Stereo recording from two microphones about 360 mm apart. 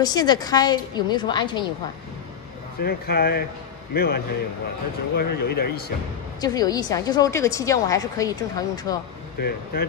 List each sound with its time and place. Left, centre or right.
0.0 s a woman's voice: centre
2.8 s speech: left
6.4 s a woman's voice: centre
9.7 s speech: left